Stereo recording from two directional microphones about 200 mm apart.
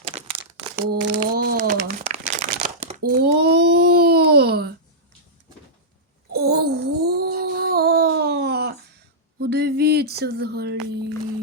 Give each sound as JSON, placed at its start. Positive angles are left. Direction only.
{"t": 0.1, "sound": "crumpling", "side_deg": -25}
{"t": 0.8, "sound": "crumpling", "side_deg": -50}
{"t": 3.0, "sound": "babbling", "side_deg": -50}
{"t": 6.3, "sound": "a sound", "side_deg": -50}